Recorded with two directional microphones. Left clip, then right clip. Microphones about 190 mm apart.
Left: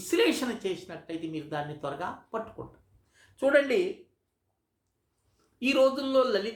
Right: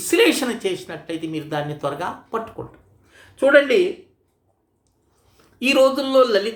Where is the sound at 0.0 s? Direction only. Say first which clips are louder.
Right 9 dB; 10° right (ahead or behind).